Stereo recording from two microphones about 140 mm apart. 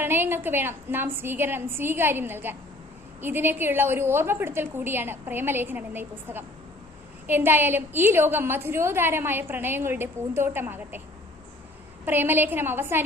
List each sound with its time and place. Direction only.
0.0 s a woman's voice: 15° right (ahead or behind)
12.0 s a woman's voice: 15° right (ahead or behind)